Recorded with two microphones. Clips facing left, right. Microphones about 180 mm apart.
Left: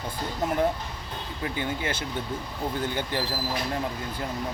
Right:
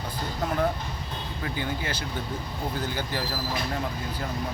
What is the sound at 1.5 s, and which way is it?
Speech, 25° left (ahead or behind).